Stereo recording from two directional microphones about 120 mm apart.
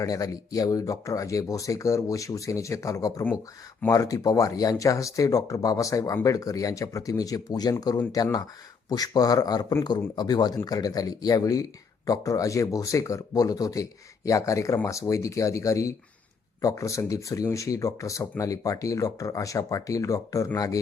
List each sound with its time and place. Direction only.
0.0 s speech: 30° left (ahead or behind)